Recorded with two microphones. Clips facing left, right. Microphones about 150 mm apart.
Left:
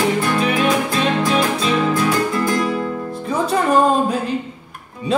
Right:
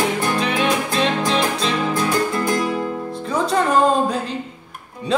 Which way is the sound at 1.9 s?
30° right (ahead or behind).